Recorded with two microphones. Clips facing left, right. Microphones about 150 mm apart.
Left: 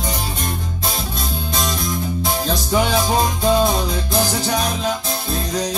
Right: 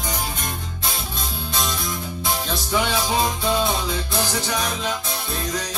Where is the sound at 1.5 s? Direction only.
40° left (ahead or behind).